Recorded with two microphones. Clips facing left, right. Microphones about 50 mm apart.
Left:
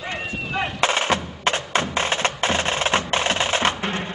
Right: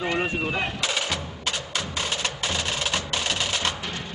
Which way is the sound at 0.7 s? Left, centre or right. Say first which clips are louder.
Left 7 dB; left.